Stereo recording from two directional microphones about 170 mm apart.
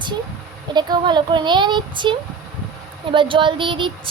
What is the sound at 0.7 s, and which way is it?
A woman's voice, 25° right (ahead or behind).